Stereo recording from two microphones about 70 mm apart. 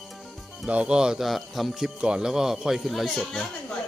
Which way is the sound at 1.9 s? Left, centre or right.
Centre.